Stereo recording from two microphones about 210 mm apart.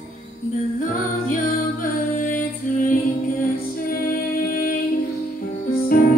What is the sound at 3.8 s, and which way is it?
Music, 45° left (ahead or behind).